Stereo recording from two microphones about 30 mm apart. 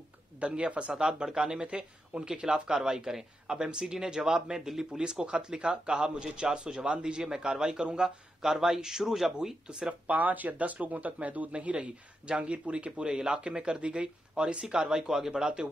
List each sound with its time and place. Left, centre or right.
0.6 s speech: right
0.9 s speech: right
3.1 s speech: centre
5.0 s speech: right
8.4 s speech: centre
10.0 s speech: right
10.6 s speech: right
11.5 s speech: right
15.0 s speech: centre
15.4 s speech: right